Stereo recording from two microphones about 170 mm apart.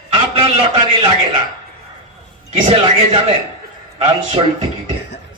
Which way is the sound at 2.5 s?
35° right (ahead or behind).